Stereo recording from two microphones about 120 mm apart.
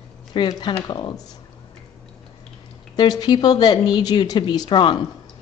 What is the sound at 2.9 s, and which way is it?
Speech, 35° left (ahead or behind).